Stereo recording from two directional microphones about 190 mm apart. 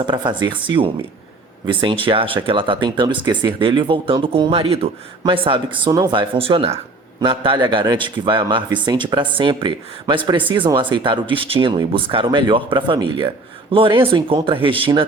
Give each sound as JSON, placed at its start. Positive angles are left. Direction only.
{"t": 0.0, "sound": "speech", "side_deg": -25}